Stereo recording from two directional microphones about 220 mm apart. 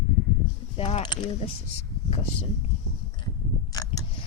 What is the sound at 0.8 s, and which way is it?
Speech, 25° left (ahead or behind).